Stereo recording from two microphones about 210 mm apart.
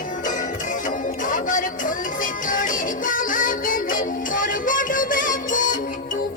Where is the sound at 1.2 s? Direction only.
40° left (ahead or behind).